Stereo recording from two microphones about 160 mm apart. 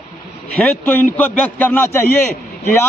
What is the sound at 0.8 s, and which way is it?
A man's voice, 10° left (ahead or behind).